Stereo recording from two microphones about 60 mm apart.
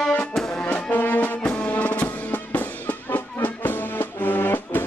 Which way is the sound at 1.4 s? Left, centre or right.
Centre.